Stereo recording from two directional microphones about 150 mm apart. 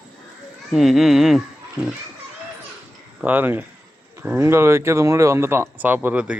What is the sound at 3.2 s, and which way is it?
Speech, 10° right (ahead or behind).